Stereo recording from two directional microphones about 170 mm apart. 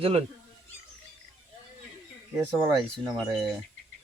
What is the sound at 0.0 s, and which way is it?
Speech, 35° right (ahead or behind).